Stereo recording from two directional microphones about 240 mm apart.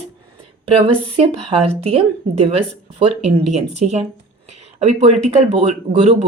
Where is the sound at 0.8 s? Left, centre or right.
Right.